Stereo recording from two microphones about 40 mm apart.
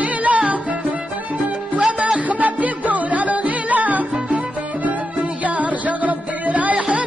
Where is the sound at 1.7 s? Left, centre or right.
Right.